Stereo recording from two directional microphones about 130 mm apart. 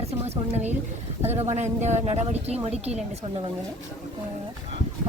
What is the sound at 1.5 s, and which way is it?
A woman's voice, 60° right (ahead or behind).